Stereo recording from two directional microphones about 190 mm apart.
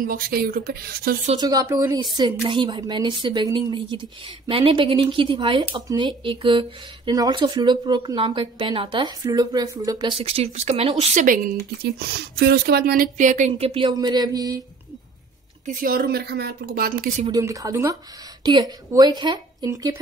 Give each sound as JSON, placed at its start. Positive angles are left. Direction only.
{"t": 0.0, "sound": "a woman's voice", "side_deg": -50}
{"t": 1.4, "sound": "speech", "side_deg": -20}
{"t": 11.8, "sound": "speech", "side_deg": -60}
{"t": 15.6, "sound": "a woman's voice", "side_deg": -45}
{"t": 17.3, "sound": "speech", "side_deg": -15}